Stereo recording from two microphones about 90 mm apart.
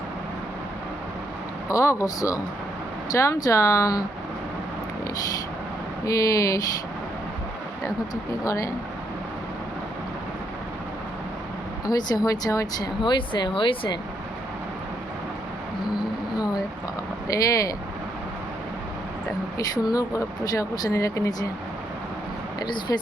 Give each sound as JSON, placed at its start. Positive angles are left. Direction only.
{"t": 1.7, "sound": "speech", "side_deg": 35}
{"t": 6.1, "sound": "speech", "side_deg": 40}
{"t": 7.9, "sound": "speech", "side_deg": 40}
{"t": 11.9, "sound": "speech", "side_deg": 45}
{"t": 13.0, "sound": "speech", "side_deg": 60}
{"t": 17.2, "sound": "speech", "side_deg": 40}
{"t": 19.5, "sound": "speech", "side_deg": 45}
{"t": 22.6, "sound": "speech", "side_deg": 50}